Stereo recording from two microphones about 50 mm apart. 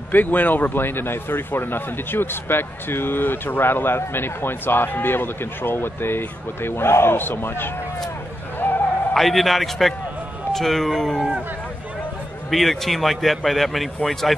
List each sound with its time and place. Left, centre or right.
0.1 s a man's voice: left
8.5 s a sound: left
9.1 s speech: centre
12.4 s speech: centre